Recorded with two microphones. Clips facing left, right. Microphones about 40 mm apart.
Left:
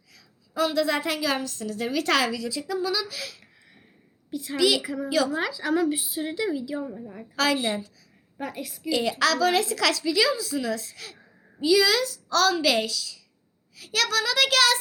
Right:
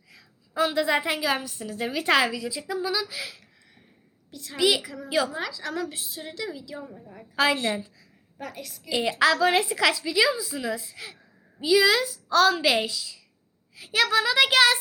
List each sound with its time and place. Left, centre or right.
0.1 s a woman's voice: centre
3.4 s a sound: centre
4.3 s a woman's voice: centre
4.5 s a woman's voice: centre
4.8 s a woman's voice: centre
5.0 s a woman's voice: centre
5.4 s a woman's voice: centre
7.5 s a woman's voice: centre
8.4 s a woman's voice: centre
8.9 s a woman's voice: centre